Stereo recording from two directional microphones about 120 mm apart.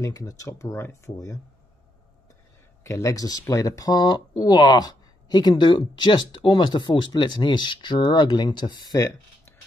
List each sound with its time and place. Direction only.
0.0 s speech: 30° left (ahead or behind)
2.8 s speech: 25° left (ahead or behind)